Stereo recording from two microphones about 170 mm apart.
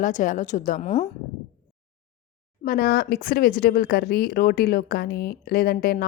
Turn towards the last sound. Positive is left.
turn(degrees=65)  # may be behind; listen again after turning